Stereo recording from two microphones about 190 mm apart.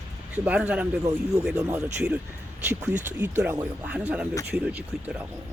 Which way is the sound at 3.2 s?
10° right (ahead or behind).